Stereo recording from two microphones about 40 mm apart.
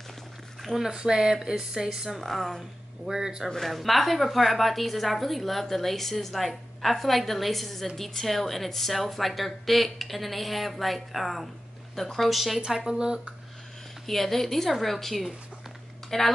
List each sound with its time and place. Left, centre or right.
0.6 s a sound: centre
0.8 s speech: centre
2.2 s a woman's voice: centre
3.1 s speech: centre
3.4 s a woman's voice: centre
12.6 s speech: centre
14.0 s a woman's voice: centre